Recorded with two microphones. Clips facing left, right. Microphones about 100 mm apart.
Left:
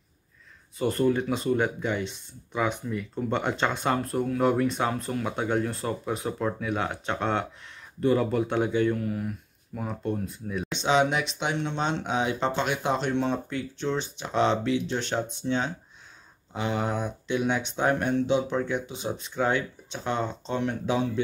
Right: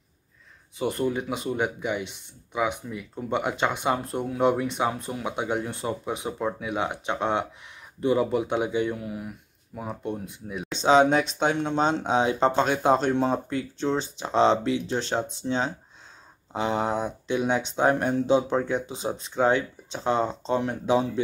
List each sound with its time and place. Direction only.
0.7 s speech: 15° right (ahead or behind)
10.8 s speech: 35° right (ahead or behind)